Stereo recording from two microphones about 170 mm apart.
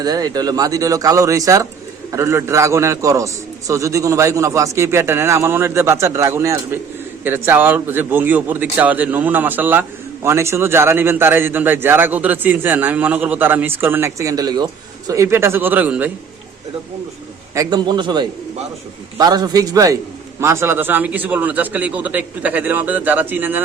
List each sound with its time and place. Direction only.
0.0 s a man's voice: 20° right (ahead or behind)
17.5 s a man's voice: 20° right (ahead or behind)